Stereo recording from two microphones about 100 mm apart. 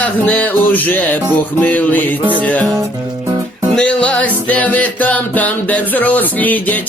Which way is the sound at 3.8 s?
10° left (ahead or behind).